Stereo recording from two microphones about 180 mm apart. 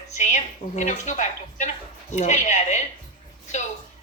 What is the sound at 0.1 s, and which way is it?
A woman's voice, 40° left (ahead or behind).